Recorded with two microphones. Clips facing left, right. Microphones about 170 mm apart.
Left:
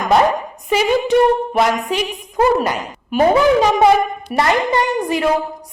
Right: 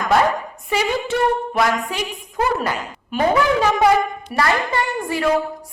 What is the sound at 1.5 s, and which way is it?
A woman's voice, 20° left (ahead or behind).